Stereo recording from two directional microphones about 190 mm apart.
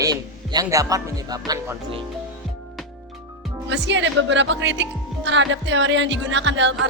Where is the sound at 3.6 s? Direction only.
70° right (ahead or behind).